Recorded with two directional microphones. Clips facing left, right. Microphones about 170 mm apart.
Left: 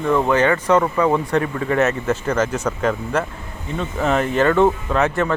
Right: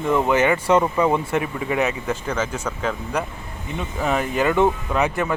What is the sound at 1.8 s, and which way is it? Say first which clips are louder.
Speech: left 5 dB; 5° left (ahead or behind).